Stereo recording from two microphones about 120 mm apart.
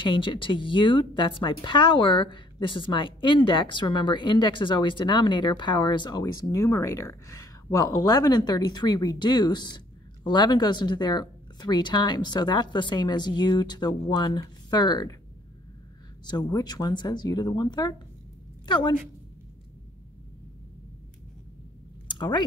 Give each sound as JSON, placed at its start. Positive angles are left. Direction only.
{"t": 0.0, "sound": "speech", "side_deg": 45}
{"t": 16.3, "sound": "speech", "side_deg": 35}
{"t": 22.0, "sound": "a sound", "side_deg": 40}